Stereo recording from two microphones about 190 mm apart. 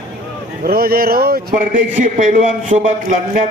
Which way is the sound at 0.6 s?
55° right (ahead or behind).